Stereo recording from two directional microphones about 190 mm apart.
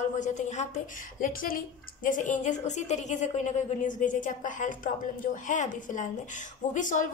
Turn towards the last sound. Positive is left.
turn(degrees=40)  # may be behind; listen again after turning